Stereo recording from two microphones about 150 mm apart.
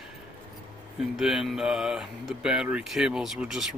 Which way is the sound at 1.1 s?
Centre (ahead or behind).